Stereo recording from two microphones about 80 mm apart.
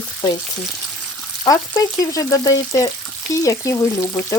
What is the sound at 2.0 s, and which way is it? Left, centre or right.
Frying, left.